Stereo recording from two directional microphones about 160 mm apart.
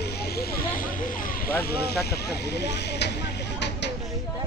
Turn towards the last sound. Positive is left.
turn(degrees=90)